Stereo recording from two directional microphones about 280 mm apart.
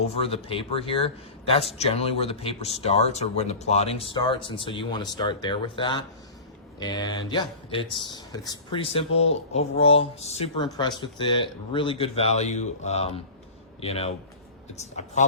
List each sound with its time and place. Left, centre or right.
0.1 s speech: centre